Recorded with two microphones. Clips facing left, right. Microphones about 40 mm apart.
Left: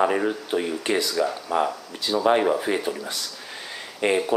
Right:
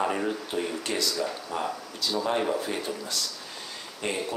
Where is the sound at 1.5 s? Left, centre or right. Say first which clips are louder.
Left 11 dB; left.